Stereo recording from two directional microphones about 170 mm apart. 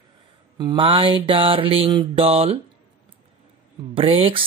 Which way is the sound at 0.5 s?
25° right (ahead or behind).